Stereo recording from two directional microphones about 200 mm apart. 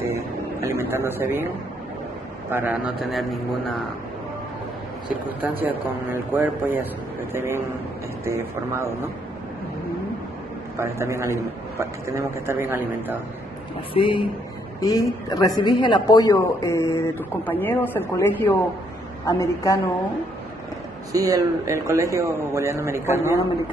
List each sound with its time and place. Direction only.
0.1 s a sound: 15° right (ahead or behind)
2.5 s a man's voice: 5° right (ahead or behind)
5.6 s speech: 10° right (ahead or behind)
10.8 s speech: 15° right (ahead or behind)
13.9 s speech: 25° left (ahead or behind)
21.1 s speech: 15° right (ahead or behind)